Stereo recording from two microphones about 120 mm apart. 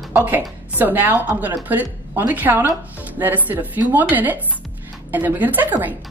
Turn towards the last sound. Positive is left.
turn(degrees=-15)  # may be behind; listen again after turning